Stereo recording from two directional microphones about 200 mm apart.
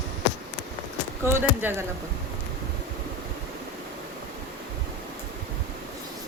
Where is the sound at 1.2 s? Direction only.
10° right (ahead or behind).